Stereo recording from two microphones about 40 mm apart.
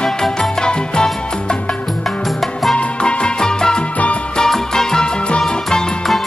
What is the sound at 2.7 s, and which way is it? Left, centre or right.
Music, left.